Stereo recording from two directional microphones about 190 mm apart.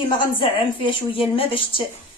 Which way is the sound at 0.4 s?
30° left (ahead or behind).